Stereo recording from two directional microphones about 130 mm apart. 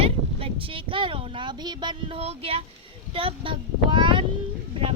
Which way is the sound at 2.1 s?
50° right (ahead or behind).